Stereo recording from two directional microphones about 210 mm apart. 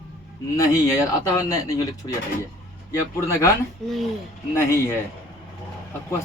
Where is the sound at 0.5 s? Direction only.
15° left (ahead or behind).